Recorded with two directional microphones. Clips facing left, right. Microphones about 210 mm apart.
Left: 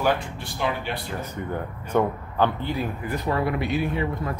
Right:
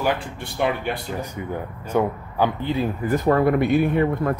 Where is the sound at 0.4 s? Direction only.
55° right (ahead or behind).